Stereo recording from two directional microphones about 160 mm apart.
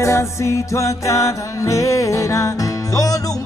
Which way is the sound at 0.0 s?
20° left (ahead or behind).